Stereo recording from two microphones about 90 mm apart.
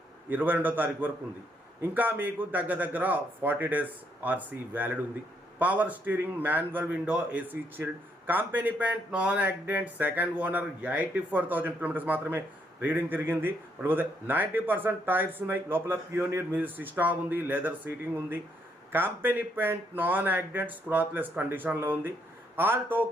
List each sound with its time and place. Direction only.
0.3 s speech: 20° right (ahead or behind)